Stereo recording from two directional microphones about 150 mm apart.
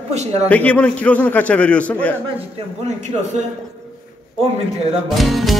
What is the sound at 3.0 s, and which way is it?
Speech, 50° right (ahead or behind).